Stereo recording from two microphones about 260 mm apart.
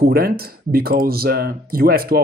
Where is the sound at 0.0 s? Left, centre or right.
Right.